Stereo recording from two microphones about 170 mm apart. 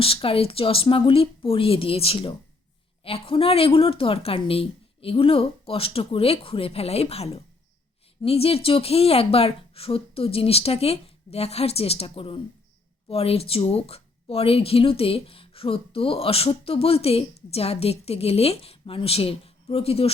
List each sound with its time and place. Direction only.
0.0 s speech: 35° left (ahead or behind)